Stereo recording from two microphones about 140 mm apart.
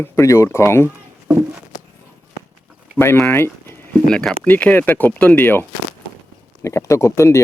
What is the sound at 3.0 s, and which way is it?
Speech, 10° left (ahead or behind).